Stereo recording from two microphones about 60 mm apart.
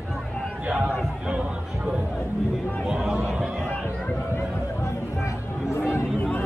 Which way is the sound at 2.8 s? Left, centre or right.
Centre.